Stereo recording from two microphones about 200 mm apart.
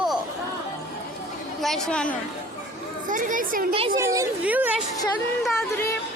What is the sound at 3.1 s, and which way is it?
Speech, 40° right (ahead or behind).